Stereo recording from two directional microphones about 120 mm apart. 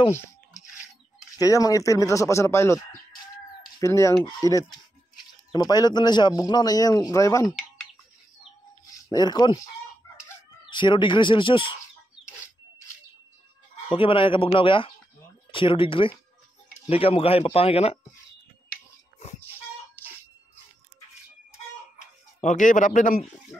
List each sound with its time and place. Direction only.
0.1 s a sound: 25° left (ahead or behind)
1.4 s speech: 30° left (ahead or behind)
9.1 s speech: 35° left (ahead or behind)
10.7 s speech: 40° left (ahead or behind)
13.9 s speech: 45° left (ahead or behind)
21.9 s a sound: 90° left